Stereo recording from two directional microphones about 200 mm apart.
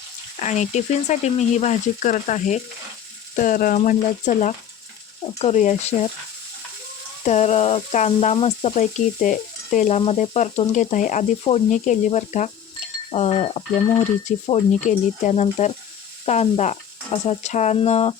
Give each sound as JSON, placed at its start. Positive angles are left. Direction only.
{"t": 0.4, "sound": "speech", "side_deg": 35}
{"t": 7.3, "sound": "speech", "side_deg": 35}